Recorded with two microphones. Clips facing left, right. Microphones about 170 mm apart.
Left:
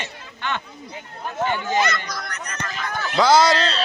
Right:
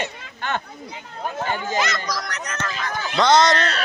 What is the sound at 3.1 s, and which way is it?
Speech, 5° left (ahead or behind).